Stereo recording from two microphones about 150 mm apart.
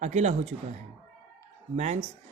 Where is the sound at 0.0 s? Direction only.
50° right (ahead or behind).